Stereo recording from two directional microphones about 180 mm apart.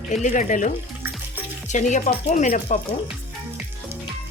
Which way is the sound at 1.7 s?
45° left (ahead or behind).